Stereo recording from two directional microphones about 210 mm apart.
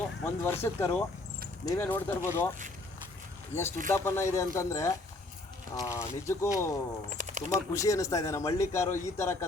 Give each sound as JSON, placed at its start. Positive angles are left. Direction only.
{"t": 0.4, "sound": "a man's voice", "side_deg": 10}
{"t": 3.5, "sound": "a man's voice", "side_deg": 10}
{"t": 7.2, "sound": "a sound", "side_deg": -35}
{"t": 7.7, "sound": "a man's voice", "side_deg": 15}